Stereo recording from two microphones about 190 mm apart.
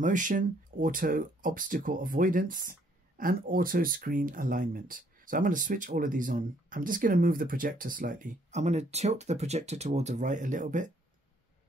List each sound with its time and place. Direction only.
0.0 s speech: 40° right (ahead or behind)